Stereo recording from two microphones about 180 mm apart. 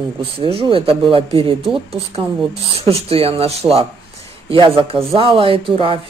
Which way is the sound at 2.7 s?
35° right (ahead or behind).